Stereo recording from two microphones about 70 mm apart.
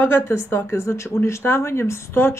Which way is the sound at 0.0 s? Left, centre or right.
Left.